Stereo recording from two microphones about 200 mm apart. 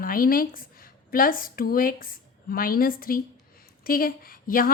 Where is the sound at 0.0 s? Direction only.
45° left (ahead or behind).